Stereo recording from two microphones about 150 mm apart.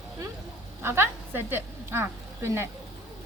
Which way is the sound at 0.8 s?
15° right (ahead or behind).